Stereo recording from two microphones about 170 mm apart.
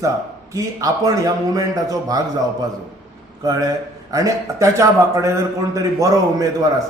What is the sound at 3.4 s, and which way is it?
A man's voice, 20° right (ahead or behind).